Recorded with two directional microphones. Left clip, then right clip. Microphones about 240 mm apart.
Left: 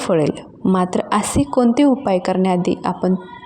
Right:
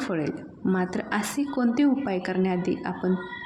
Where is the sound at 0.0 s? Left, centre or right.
Left.